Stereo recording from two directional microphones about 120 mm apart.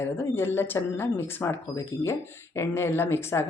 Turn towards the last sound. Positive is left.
turn(degrees=20)  # may be behind; listen again after turning